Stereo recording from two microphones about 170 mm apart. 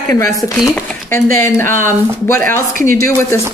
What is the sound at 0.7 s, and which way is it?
Speech, 15° left (ahead or behind).